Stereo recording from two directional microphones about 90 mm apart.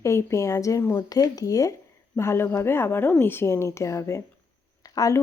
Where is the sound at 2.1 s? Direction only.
30° left (ahead or behind).